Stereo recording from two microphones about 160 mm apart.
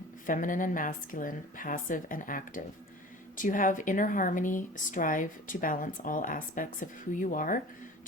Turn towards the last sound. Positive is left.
turn(degrees=60)  # may be behind; listen again after turning